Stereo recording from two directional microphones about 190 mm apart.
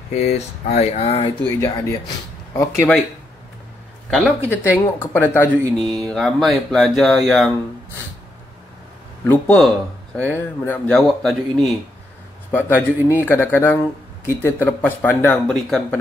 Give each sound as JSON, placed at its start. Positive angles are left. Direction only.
{"t": 0.1, "sound": "speech", "side_deg": 35}
{"t": 1.4, "sound": "speech", "side_deg": 10}
{"t": 4.5, "sound": "speech", "side_deg": 10}
{"t": 9.2, "sound": "speech", "side_deg": 10}